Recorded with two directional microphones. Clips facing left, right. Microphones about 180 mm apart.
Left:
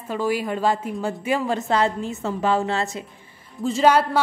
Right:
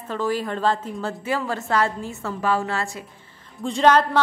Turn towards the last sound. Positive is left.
turn(degrees=10)  # may be behind; listen again after turning